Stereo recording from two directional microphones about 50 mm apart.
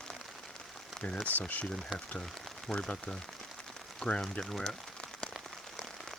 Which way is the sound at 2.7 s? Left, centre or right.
Centre.